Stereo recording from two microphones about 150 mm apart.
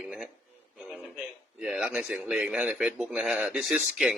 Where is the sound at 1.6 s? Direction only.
5° right (ahead or behind).